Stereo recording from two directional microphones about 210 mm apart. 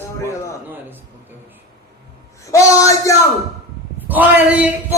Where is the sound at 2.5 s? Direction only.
15° left (ahead or behind).